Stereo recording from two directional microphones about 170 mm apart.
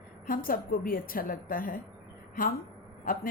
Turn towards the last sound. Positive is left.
turn(degrees=55)  # may be behind; listen again after turning